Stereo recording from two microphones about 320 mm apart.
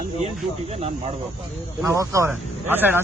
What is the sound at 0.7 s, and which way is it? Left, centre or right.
Speech, centre.